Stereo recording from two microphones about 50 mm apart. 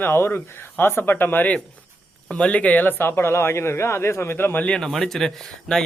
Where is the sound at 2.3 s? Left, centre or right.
Left.